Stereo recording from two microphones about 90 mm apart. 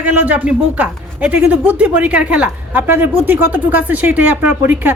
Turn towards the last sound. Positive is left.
turn(degrees=-20)  # may be behind; listen again after turning